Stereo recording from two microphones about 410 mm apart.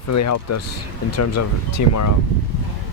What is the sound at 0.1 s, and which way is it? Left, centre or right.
Speech, left.